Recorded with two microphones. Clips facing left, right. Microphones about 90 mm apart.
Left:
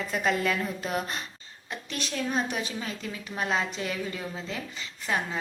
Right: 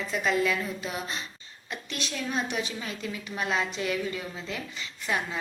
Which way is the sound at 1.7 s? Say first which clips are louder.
Left 1 dB; 35° left (ahead or behind).